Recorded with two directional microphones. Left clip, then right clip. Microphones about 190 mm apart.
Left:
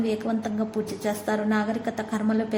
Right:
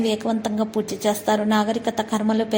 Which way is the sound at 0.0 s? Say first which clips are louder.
Right 4 dB; 15° right (ahead or behind).